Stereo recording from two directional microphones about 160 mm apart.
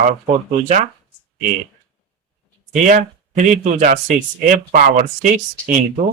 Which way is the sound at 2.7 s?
50° right (ahead or behind).